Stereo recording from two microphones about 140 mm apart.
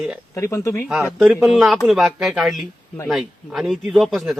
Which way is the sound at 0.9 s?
5° right (ahead or behind).